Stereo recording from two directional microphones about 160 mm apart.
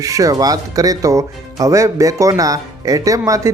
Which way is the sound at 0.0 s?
20° right (ahead or behind).